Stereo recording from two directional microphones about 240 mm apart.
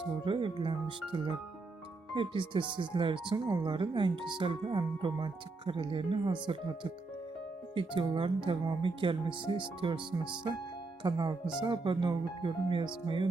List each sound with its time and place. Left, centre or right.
0.3 s speech: right
2.1 s speech: centre
7.8 s speech: centre